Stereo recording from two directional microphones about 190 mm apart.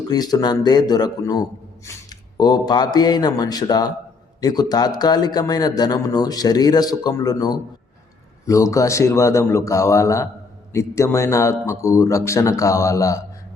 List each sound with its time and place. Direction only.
0.1 s a man's voice: 20° left (ahead or behind)